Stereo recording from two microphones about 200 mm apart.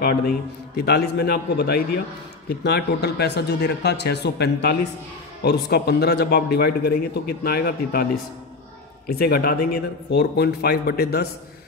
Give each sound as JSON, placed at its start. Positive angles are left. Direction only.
{"t": 0.0, "sound": "a man's voice", "side_deg": 50}